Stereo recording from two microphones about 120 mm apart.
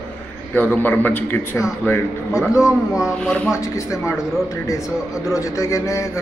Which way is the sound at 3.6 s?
25° left (ahead or behind).